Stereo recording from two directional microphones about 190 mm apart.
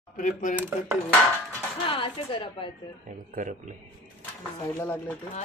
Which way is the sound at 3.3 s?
40° right (ahead or behind).